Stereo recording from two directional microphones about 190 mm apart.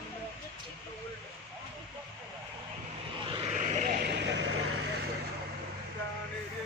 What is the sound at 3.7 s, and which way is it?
Vehicle, 45° right (ahead or behind).